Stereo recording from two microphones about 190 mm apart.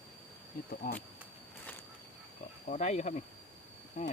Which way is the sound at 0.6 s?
50° left (ahead or behind).